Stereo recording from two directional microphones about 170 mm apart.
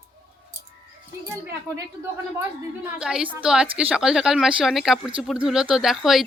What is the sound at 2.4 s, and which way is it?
A woman's voice, 10° right (ahead or behind).